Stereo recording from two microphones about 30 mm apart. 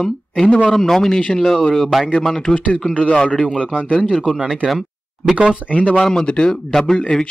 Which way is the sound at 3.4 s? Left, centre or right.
Right.